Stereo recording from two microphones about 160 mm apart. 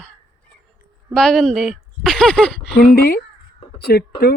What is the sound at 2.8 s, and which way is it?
Speech, 65° left (ahead or behind).